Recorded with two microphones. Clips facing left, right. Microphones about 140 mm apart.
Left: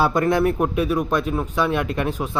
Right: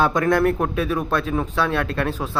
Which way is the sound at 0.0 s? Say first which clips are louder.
Even; 10° left (ahead or behind).